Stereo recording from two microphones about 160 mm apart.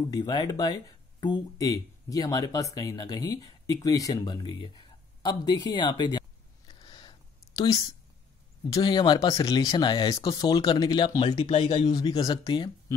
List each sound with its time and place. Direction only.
0.1 s speech: 25° left (ahead or behind)
6.7 s a sound: 25° left (ahead or behind)
7.5 s speech: 25° left (ahead or behind)
11.5 s speech: 45° left (ahead or behind)
11.9 s speech: 25° left (ahead or behind)